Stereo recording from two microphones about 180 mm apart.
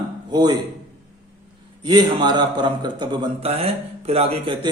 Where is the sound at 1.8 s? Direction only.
25° right (ahead or behind).